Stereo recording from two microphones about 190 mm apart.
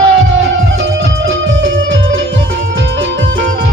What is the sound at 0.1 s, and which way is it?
Music, 85° right.